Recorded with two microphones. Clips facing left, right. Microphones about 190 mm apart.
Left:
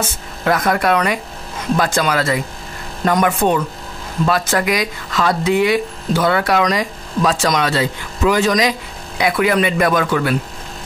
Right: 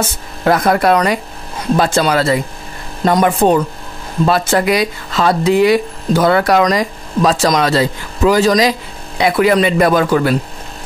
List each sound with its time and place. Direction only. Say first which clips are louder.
0.5 s speech: right 4 dB; 30° right (ahead or behind)